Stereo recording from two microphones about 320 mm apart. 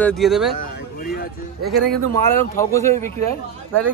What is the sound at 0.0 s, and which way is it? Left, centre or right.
Speech, centre.